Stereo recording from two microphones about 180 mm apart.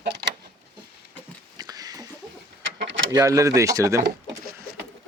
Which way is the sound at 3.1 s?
20° right (ahead or behind).